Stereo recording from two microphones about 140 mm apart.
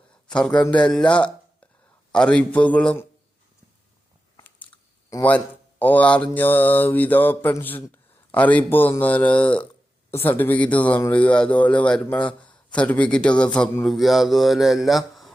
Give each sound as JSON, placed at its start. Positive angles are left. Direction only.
{"t": 0.3, "sound": "a man's voice", "side_deg": 5}
{"t": 4.4, "sound": "biting", "side_deg": 10}
{"t": 5.8, "sound": "a man's voice", "side_deg": 10}